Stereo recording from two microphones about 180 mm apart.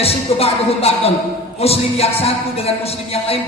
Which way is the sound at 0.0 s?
35° left (ahead or behind).